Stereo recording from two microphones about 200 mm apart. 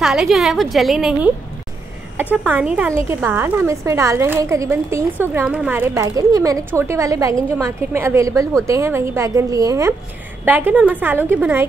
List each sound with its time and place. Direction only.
0.0 s a woman's voice: centre (ahead or behind)
2.3 s a woman's voice: 10° right (ahead or behind)
6.0 s a woman's voice: 15° right (ahead or behind)